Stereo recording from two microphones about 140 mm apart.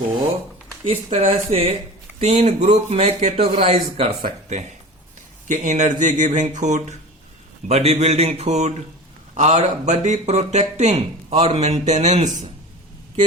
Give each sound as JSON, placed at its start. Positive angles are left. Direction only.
{"t": 0.9, "sound": "speech", "side_deg": -45}